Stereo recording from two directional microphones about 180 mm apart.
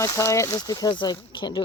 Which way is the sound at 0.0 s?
15° left (ahead or behind).